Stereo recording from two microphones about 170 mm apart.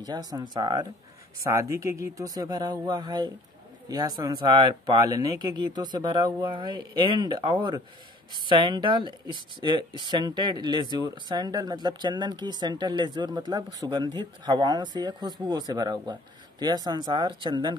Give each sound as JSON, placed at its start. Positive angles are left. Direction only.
{"t": 0.0, "sound": "speech", "side_deg": -25}